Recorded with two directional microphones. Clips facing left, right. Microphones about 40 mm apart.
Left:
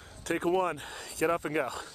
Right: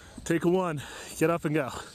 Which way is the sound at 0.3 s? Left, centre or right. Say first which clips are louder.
Right 3 dB; centre.